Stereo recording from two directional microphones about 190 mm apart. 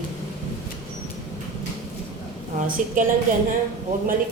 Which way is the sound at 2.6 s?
40° right (ahead or behind).